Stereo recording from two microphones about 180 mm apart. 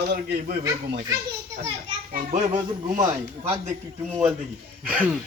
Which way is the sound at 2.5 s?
20° right (ahead or behind).